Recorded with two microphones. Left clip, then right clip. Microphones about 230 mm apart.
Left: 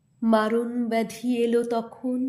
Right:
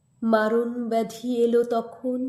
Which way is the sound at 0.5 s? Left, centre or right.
Left.